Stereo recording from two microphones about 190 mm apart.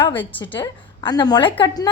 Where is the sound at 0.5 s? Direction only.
20° left (ahead or behind).